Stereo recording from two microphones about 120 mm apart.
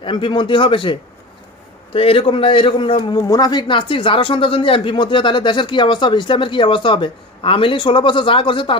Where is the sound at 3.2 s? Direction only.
30° left (ahead or behind).